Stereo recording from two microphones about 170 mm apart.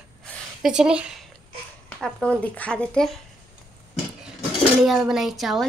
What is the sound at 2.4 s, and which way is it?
Speech, 5° left (ahead or behind).